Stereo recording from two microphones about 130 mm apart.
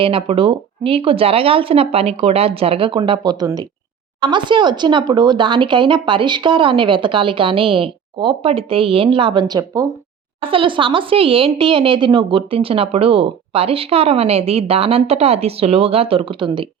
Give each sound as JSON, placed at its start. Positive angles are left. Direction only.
{"t": 0.0, "sound": "a woman's voice", "side_deg": -45}
{"t": 10.4, "sound": "a woman's voice", "side_deg": -40}